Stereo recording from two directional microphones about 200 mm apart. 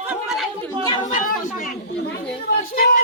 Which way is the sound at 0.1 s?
Centre (ahead or behind).